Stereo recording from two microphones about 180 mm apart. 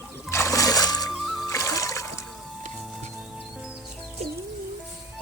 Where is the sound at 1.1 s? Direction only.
Centre (ahead or behind).